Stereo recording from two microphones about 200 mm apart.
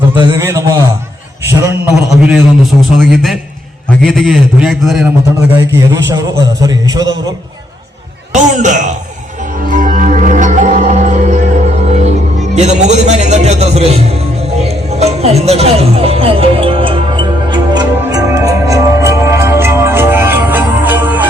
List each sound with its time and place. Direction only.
0.3 s a sound: 15° right (ahead or behind)
1.5 s a man's voice: 15° right (ahead or behind)
5.9 s a man's voice: 15° right (ahead or behind)
8.3 s speech: 40° right (ahead or behind)
9.6 s music: 40° right (ahead or behind); by 21.2 s 10° right (ahead or behind)